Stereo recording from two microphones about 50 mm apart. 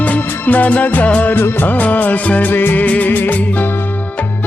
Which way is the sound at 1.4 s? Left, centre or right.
Left.